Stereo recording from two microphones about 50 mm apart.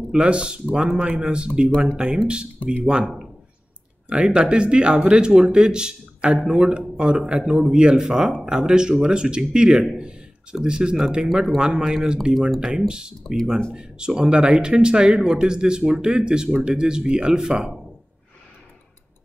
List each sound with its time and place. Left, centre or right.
0.1 s a man's voice: centre